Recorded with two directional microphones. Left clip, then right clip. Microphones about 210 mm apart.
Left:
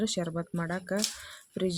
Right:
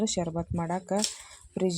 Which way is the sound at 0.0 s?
Centre (ahead or behind).